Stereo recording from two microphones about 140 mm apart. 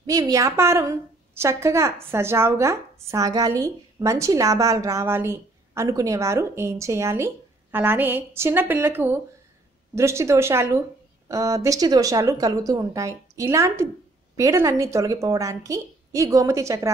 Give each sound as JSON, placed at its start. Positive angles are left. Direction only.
{"t": 0.0, "sound": "a woman's voice", "side_deg": -25}